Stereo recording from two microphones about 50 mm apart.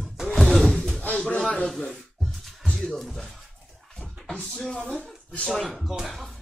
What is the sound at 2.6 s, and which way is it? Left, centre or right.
Speech, centre.